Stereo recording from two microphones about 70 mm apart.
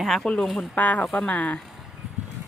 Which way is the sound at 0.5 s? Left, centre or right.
Centre.